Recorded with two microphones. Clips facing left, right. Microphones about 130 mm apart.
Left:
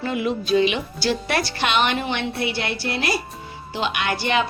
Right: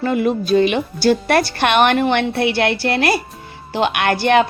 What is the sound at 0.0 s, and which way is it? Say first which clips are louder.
A woman's voice: right 6 dB; 50° right (ahead or behind).